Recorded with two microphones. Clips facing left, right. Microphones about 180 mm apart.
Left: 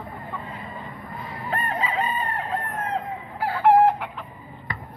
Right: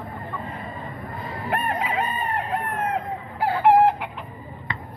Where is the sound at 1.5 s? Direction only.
70° right (ahead or behind).